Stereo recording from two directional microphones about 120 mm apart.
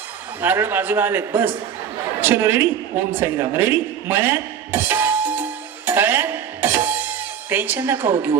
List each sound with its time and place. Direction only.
0.4 s a man's voice: 15° right (ahead or behind)
3.1 s music: 20° right (ahead or behind)